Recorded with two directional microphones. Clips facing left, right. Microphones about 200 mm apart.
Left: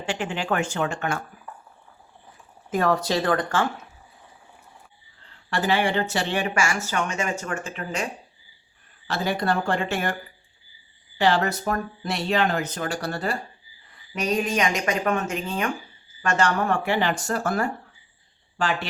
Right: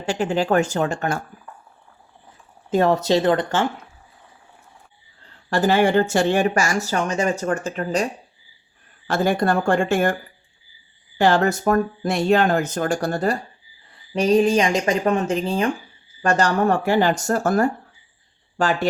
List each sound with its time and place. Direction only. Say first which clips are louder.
0.0 s speech: right 7 dB; 40° right (ahead or behind)
2.6 s speech: right 5 dB; 25° right (ahead or behind)
5.5 s speech: right 6 dB; 40° right (ahead or behind)
9.0 s speech: right 5 dB; 50° right (ahead or behind)
11.2 s speech: right 4 dB; 45° right (ahead or behind)
14.1 s speech: right 8 dB; 30° right (ahead or behind)